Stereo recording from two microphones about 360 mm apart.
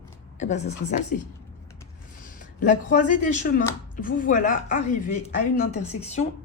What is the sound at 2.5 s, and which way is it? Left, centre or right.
A woman's voice, left.